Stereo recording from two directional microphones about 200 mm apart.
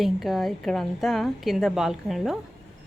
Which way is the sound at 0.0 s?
Centre (ahead or behind).